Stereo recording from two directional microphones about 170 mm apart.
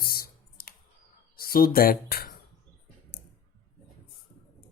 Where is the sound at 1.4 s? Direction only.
60° left (ahead or behind).